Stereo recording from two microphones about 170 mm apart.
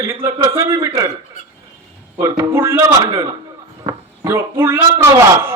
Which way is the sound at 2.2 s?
15° right (ahead or behind).